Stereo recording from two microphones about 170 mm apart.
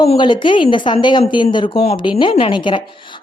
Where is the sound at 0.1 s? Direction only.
30° left (ahead or behind).